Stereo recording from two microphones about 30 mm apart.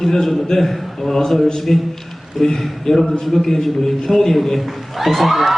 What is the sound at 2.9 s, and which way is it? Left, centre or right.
A man's voice, centre.